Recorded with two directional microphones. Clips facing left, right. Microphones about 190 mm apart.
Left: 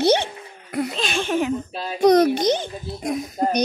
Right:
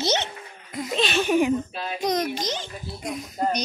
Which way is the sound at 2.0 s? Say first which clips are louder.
Left 11 dB; 60° left (ahead or behind).